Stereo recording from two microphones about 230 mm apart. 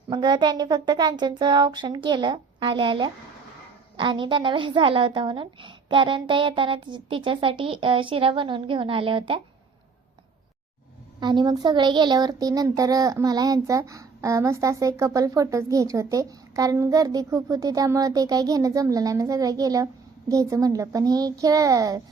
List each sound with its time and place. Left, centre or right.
0.1 s a woman's voice: centre
11.2 s a child's voice: centre